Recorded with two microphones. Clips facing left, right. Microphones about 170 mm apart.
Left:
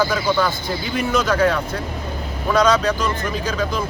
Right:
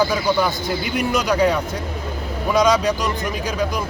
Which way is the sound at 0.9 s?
15° right (ahead or behind).